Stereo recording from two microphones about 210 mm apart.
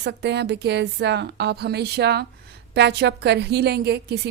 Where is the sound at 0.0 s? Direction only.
55° right (ahead or behind).